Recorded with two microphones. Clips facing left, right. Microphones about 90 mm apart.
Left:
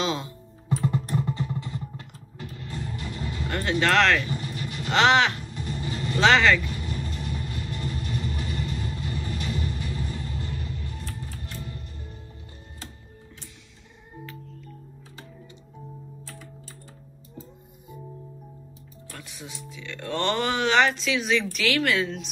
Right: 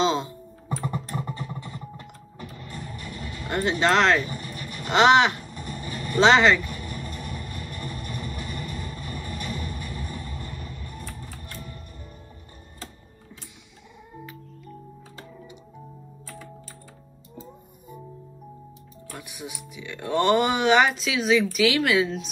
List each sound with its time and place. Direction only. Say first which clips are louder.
0.0 s music: right 5 dB; 25° right (ahead or behind)
0.7 s music: left 4 dB; 35° right (ahead or behind)
2.4 s vehicle: left 2 dB; 35° right (ahead or behind)
2.9 s music: left 3 dB; 30° left (ahead or behind)
3.4 s music: right 4 dB; 20° right (ahead or behind)
3.7 s vehicle: even; 20° right (ahead or behind)
4.9 s speech: right 3 dB; 20° right (ahead or behind)
5.4 s vehicle: left 2 dB; 40° right (ahead or behind)
5.8 s vehicle: left 3 dB; 25° left (ahead or behind)
6.1 s speech: right 2 dB; 20° right (ahead or behind)
6.6 s vehicle: left 2 dB; 35° right (ahead or behind)
9.7 s a sound: left 2 dB; 35° right (ahead or behind)
19.1 s music: right 3 dB; 15° right (ahead or behind)